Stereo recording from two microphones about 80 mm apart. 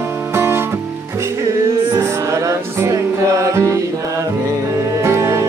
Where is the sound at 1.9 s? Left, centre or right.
Right.